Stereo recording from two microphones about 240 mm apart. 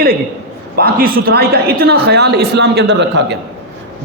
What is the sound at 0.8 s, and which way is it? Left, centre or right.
Speech, right.